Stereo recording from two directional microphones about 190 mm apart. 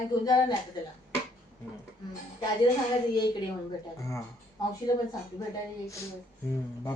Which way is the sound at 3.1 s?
20° left (ahead or behind).